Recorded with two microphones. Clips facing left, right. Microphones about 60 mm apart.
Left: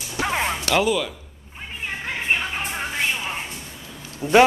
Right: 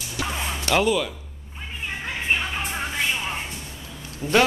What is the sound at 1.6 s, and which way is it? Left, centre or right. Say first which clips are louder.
Cat: left 1 dB; left.